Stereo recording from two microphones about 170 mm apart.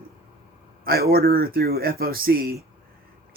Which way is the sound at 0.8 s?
65° right (ahead or behind).